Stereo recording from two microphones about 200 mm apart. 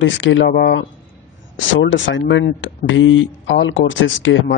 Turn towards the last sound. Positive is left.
turn(degrees=70)  # may be behind; listen again after turning